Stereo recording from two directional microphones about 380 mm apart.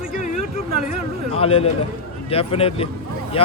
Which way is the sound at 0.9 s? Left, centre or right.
Centre.